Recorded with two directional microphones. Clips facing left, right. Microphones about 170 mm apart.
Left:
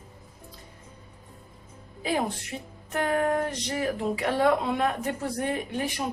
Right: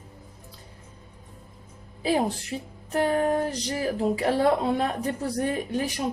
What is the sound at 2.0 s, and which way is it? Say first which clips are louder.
Music: right 4 dB; 30° right (ahead or behind).